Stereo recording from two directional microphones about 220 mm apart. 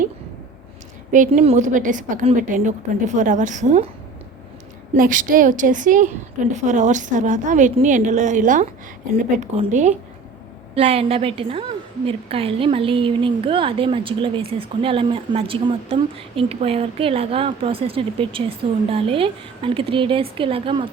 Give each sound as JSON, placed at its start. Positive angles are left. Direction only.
{"t": 1.1, "sound": "a woman's voice", "side_deg": -35}
{"t": 4.9, "sound": "a woman's voice", "side_deg": -40}